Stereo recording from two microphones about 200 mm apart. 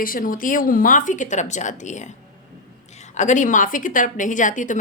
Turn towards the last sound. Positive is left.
turn(degrees=40)  # may be behind; listen again after turning